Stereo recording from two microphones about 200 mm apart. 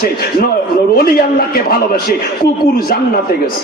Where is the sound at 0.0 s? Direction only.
50° left (ahead or behind).